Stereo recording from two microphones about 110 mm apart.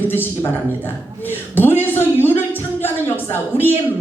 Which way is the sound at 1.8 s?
20° left (ahead or behind).